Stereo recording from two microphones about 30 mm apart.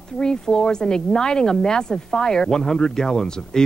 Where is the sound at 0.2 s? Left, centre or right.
Left.